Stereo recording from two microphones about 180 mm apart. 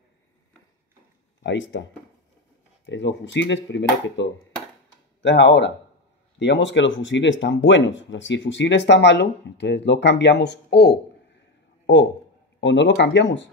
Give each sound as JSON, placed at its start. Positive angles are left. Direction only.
{"t": 1.4, "sound": "speech", "side_deg": 90}
{"t": 2.9, "sound": "speech", "side_deg": 85}
{"t": 5.2, "sound": "speech", "side_deg": 70}
{"t": 6.4, "sound": "speech", "side_deg": 85}
{"t": 12.5, "sound": "speech", "side_deg": 85}